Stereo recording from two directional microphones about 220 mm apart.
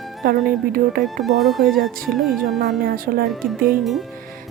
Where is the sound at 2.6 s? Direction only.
45° right (ahead or behind).